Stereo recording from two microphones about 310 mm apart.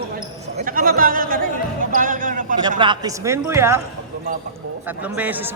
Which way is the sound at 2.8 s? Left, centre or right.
Centre.